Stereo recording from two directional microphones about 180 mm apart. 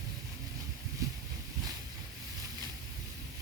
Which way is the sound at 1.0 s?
20° right (ahead or behind).